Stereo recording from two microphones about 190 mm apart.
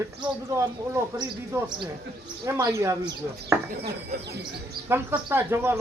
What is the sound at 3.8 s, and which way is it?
Speech, 60° right (ahead or behind).